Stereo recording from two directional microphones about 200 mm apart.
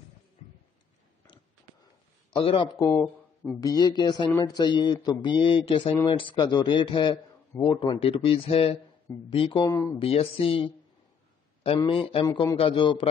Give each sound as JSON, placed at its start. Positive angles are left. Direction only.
{"t": 2.3, "sound": "a man's voice", "side_deg": 25}
{"t": 9.7, "sound": "speech", "side_deg": 15}
{"t": 10.0, "sound": "a man's voice", "side_deg": 30}
{"t": 12.3, "sound": "a man's voice", "side_deg": 15}